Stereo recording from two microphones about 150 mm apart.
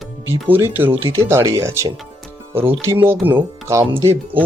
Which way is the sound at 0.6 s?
15° right (ahead or behind).